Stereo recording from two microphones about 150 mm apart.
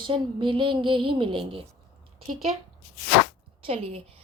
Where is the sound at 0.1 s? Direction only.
35° right (ahead or behind).